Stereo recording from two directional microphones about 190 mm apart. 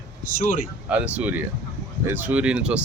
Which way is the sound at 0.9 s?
10° right (ahead or behind).